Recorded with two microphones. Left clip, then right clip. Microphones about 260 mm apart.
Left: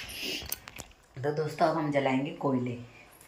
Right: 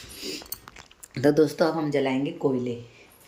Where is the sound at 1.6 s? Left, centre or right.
Centre.